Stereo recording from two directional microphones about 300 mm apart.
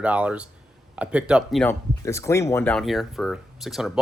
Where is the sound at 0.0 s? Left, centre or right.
Centre.